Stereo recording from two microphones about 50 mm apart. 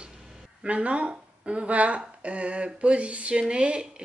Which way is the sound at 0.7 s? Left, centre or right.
Right.